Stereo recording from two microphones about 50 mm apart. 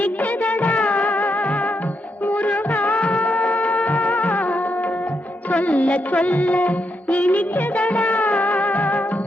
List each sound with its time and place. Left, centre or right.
0.0 s music of bollywood: left
5.5 s music: left